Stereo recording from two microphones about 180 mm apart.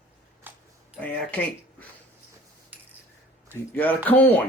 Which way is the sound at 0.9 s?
10° left (ahead or behind).